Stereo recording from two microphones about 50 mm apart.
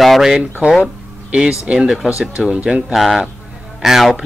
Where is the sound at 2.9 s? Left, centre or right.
Centre.